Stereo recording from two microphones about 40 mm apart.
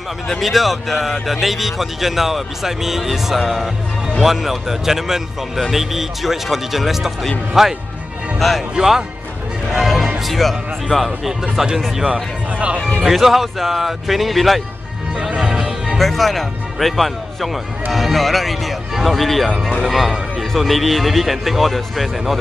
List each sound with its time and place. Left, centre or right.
0.4 s a man's voice: centre
8.4 s a man's voice: centre
9.7 s music: centre
10.2 s a man's voice: centre
12.1 s speech: right
13.0 s a man's voice: centre
15.1 s music: centre
16.0 s a man's voice: centre